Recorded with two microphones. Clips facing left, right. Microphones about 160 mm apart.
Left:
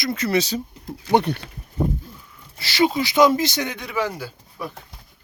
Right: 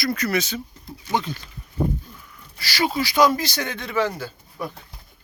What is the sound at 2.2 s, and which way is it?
Speech, 25° left (ahead or behind).